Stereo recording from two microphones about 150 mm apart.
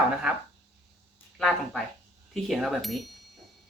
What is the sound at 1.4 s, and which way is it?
Speech, 5° left (ahead or behind).